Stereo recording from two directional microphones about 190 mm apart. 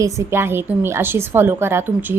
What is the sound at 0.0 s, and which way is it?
A woman's voice, 15° right (ahead or behind).